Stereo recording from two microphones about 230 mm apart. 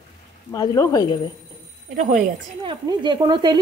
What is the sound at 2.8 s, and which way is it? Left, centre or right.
Speech, centre.